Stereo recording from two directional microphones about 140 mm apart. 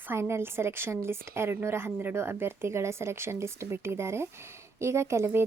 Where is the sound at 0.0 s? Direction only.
15° right (ahead or behind).